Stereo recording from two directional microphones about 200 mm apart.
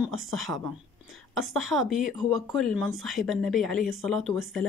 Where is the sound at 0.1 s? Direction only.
90° right.